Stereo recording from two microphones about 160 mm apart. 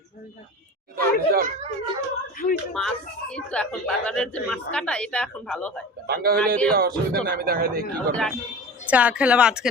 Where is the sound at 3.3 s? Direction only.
5° left (ahead or behind).